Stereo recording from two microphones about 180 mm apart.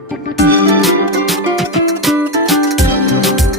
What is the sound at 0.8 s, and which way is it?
Music, centre (ahead or behind).